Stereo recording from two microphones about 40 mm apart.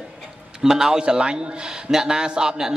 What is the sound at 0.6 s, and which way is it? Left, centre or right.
A man's voice, centre.